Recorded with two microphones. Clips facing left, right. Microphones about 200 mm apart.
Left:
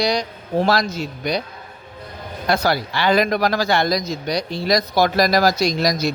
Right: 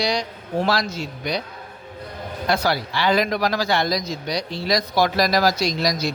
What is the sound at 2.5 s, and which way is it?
Speech, 45° left (ahead or behind).